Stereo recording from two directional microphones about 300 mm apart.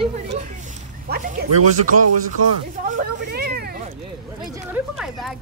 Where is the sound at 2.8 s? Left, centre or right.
Right.